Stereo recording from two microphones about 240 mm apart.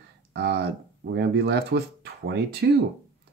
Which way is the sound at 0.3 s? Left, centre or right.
Right.